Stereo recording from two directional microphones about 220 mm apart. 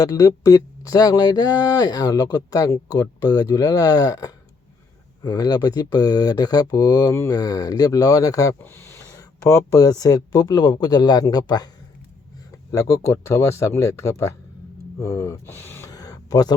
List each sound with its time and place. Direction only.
0.0 s speech: 15° left (ahead or behind)
12.7 s speech: 15° left (ahead or behind)
14.9 s gasp: 15° left (ahead or behind)